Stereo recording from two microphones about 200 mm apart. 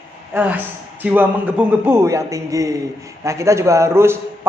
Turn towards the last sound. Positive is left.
turn(degrees=-10)  # may be behind; listen again after turning